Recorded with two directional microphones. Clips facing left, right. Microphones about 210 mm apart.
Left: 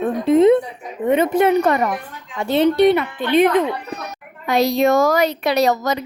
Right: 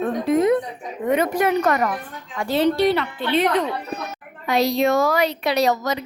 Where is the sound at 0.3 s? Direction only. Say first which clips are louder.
Left 6 dB; 25° left (ahead or behind).